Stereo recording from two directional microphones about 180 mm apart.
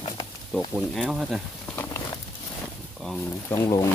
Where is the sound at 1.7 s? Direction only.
10° left (ahead or behind).